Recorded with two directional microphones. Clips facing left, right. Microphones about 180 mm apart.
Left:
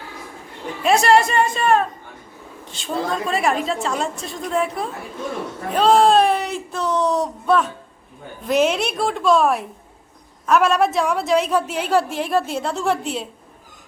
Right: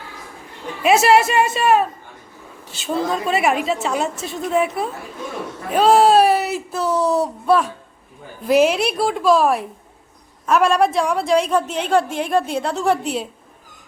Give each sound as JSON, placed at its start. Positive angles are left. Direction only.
{"t": 0.8, "sound": "a woman's voice", "side_deg": -5}